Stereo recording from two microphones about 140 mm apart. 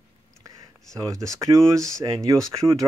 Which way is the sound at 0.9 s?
20° right (ahead or behind).